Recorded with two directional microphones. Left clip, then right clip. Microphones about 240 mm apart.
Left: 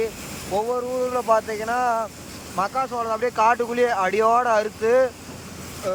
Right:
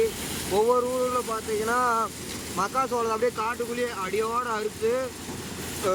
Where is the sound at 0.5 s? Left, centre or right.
Centre.